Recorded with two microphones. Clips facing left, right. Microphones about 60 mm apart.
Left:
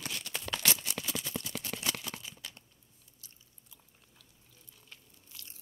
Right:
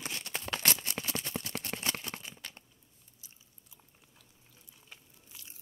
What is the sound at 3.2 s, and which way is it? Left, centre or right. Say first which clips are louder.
Chewing: even; centre.